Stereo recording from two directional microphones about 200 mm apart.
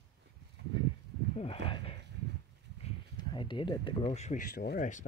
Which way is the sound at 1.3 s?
30° left (ahead or behind).